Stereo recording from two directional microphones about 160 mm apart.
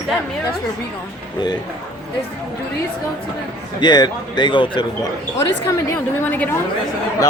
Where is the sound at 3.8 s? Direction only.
25° left (ahead or behind).